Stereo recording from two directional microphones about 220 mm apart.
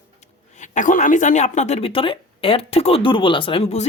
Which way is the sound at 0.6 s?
35° left (ahead or behind).